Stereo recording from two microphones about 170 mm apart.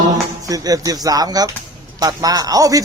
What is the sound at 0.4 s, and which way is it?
Speech, 20° right (ahead or behind).